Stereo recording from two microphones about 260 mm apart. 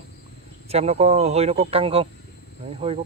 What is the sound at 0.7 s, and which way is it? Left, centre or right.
Speech, right.